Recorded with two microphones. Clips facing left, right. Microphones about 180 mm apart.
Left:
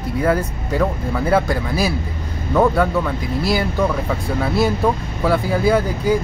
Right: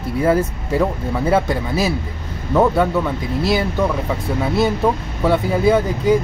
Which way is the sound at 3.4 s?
25° right (ahead or behind).